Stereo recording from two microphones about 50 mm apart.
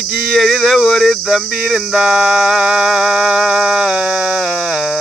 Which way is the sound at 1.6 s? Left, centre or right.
Centre.